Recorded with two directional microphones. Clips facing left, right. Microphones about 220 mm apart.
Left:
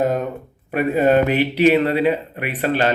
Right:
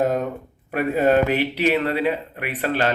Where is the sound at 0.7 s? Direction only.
Centre (ahead or behind).